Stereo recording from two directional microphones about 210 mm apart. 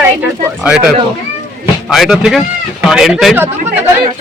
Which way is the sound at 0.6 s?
5° right (ahead or behind).